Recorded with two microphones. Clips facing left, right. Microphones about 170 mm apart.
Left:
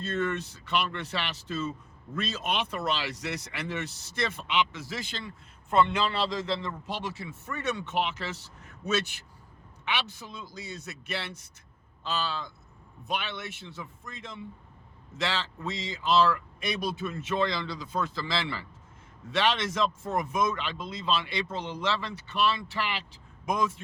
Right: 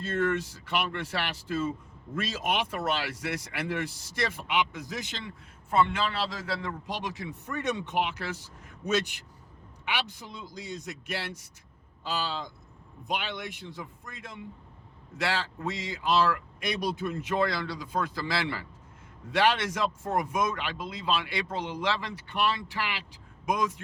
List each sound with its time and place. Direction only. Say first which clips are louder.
0.1 s a man's voice: right 3 dB; 10° right (ahead or behind)
5.7 s speech: left 1 dB; 5° right (ahead or behind)